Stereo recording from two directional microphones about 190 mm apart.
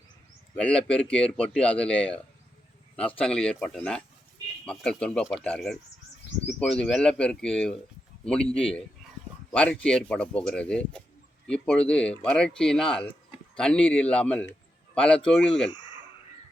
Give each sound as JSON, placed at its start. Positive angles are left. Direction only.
{"t": 0.5, "sound": "a man's voice", "side_deg": 5}